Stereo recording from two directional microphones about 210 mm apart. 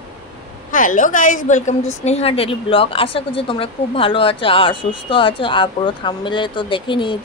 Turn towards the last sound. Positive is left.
turn(degrees=25)  # may be behind; listen again after turning